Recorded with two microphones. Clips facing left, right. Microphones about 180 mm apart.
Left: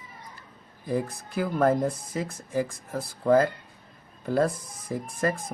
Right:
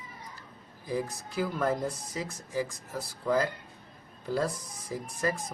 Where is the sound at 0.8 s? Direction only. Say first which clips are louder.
Left 4 dB; 55° left (ahead or behind).